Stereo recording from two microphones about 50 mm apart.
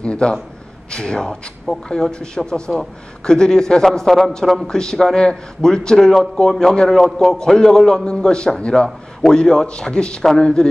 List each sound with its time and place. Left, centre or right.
0.0 s a man's voice: left